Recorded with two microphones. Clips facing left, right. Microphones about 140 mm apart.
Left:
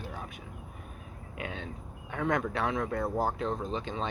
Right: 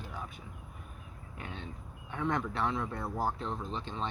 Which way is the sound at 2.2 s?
65° left (ahead or behind).